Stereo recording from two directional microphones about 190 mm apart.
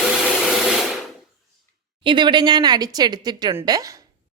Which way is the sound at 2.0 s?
25° right (ahead or behind).